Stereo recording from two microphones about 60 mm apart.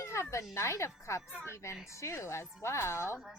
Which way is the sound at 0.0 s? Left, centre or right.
Left.